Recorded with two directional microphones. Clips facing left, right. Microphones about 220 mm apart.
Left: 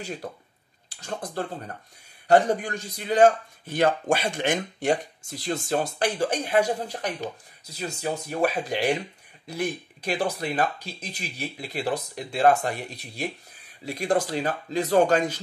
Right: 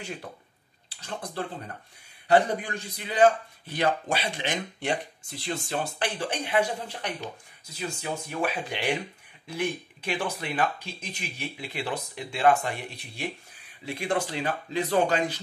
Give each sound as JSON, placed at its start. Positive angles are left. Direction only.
{"t": 0.2, "sound": "speech", "side_deg": 40}